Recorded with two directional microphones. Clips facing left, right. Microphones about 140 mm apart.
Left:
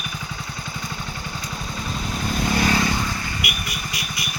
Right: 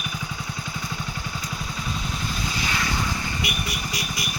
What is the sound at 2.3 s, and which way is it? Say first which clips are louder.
Vehicle: left 12 dB; 55° left (ahead or behind).